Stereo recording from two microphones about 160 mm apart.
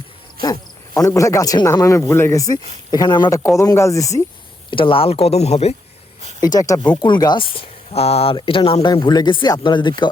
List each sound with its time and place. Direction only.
0.4 s speech: 20° left (ahead or behind)
4.7 s speech: 35° left (ahead or behind)
6.4 s speech: 20° left (ahead or behind)